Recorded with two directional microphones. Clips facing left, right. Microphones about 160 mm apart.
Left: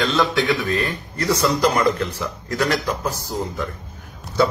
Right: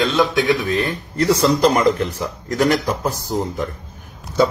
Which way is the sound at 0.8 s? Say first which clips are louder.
Right 4 dB; 25° right (ahead or behind).